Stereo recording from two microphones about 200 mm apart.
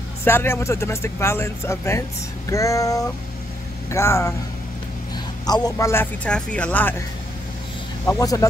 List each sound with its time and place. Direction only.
0.2 s speech: 10° left (ahead or behind)
8.1 s speech: 15° left (ahead or behind)